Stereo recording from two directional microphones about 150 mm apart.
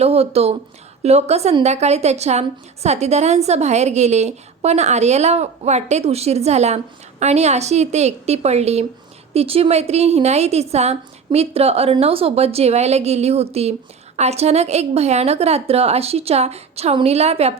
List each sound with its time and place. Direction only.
0.0 s a woman's voice: 45° right (ahead or behind)